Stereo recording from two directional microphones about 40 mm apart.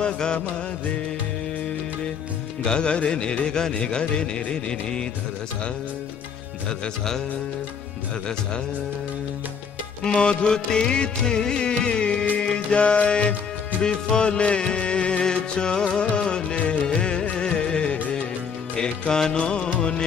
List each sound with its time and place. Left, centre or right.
0.0 s music: left
2.6 s music: left
10.0 s music: left